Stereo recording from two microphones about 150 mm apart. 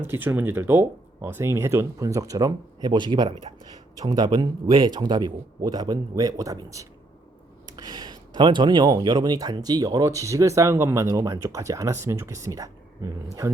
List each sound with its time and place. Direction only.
0.0 s speech: 15° right (ahead or behind)